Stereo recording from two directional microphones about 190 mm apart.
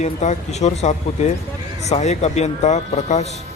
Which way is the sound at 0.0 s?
40° left (ahead or behind).